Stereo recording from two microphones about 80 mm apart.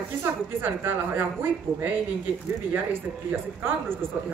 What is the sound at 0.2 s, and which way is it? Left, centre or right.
Speech, right.